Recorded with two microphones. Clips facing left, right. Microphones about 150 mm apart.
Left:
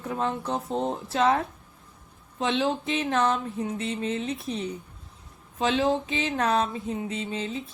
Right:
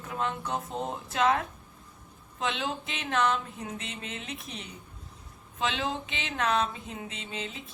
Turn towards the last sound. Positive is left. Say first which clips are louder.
# left 8 dB
turn(degrees=35)  # may be behind; listen again after turning